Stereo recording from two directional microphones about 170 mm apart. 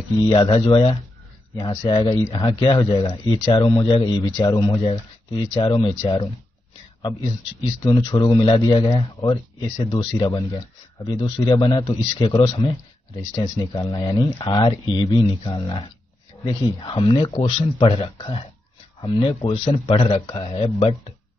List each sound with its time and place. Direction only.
0.3 s speech: 30° left (ahead or behind)
1.5 s speech: 25° left (ahead or behind)
7.6 s speech: 25° left (ahead or behind)